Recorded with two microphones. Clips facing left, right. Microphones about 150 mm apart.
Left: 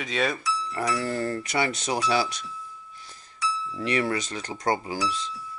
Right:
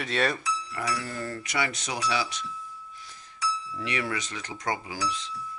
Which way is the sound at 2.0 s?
45° left (ahead or behind).